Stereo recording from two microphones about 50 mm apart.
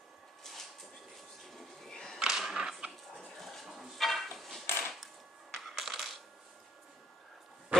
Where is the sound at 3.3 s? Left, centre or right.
Centre.